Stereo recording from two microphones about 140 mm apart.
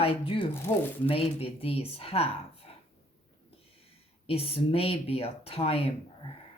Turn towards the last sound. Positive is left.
turn(degrees=45)  # may be behind; listen again after turning